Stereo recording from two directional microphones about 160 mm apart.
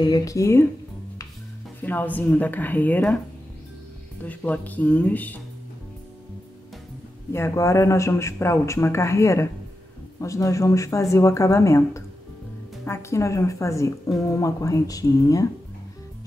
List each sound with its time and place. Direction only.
0.0 s speech: 20° left (ahead or behind)
1.8 s speech: 10° left (ahead or behind)
4.2 s speech: 10° left (ahead or behind)
7.3 s speech: 15° left (ahead or behind)